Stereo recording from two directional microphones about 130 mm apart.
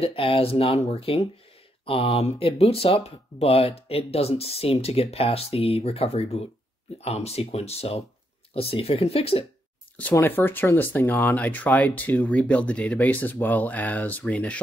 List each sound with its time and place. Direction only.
0.0 s speech: 45° left (ahead or behind)
10.1 s speech: 15° left (ahead or behind)